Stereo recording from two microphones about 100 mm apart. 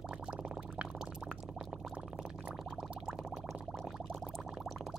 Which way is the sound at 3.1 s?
5° right (ahead or behind).